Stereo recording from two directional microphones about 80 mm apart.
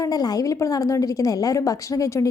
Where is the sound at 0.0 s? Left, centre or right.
Left.